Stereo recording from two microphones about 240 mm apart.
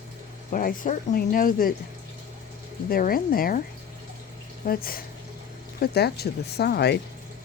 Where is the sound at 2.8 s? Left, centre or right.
Left.